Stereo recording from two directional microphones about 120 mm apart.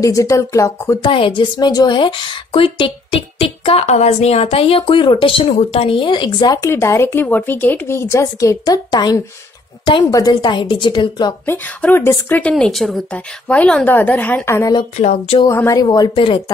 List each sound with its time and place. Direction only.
0.0 s speech: 25° left (ahead or behind)
1.0 s a woman's voice: 45° left (ahead or behind)
11.4 s a woman's voice: 15° left (ahead or behind)
15.0 s a sound: 60° left (ahead or behind)
15.4 s a woman's voice: 25° left (ahead or behind)